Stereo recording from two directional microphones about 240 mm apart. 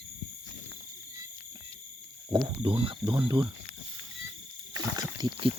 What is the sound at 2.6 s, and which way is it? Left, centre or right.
Speech, right.